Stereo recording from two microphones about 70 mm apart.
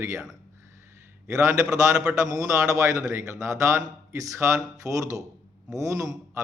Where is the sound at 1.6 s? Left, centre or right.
Centre.